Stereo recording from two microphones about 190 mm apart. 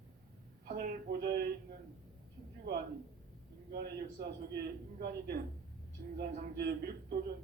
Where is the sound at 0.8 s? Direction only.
50° right (ahead or behind).